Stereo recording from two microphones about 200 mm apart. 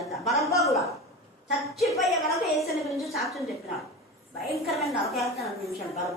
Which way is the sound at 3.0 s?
Centre (ahead or behind).